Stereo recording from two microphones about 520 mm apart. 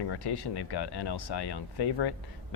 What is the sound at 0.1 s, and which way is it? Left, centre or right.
Speech, left.